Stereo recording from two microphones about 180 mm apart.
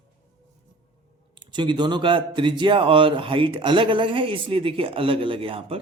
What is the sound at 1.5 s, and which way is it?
Speech, 25° right (ahead or behind).